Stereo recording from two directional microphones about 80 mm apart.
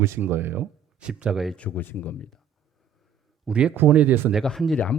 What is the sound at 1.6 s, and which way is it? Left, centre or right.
Speech, left.